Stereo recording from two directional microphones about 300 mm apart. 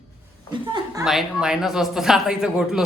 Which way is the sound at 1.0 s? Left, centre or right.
Centre.